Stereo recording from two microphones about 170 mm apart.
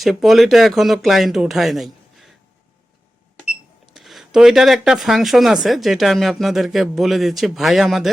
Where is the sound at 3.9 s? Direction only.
Centre (ahead or behind).